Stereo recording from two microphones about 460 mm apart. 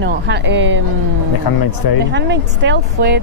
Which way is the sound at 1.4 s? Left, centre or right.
Left.